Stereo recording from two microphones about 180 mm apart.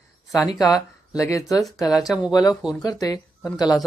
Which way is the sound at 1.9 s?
5° right (ahead or behind).